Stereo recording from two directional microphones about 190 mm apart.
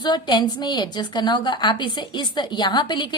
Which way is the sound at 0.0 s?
25° left (ahead or behind).